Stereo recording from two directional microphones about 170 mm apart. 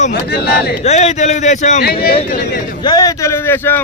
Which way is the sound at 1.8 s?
65° left (ahead or behind).